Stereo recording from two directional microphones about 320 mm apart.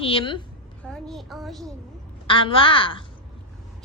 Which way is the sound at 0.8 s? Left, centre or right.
Centre.